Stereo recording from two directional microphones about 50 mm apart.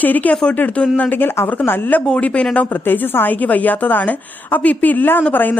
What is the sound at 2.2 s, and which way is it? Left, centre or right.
Speech, left.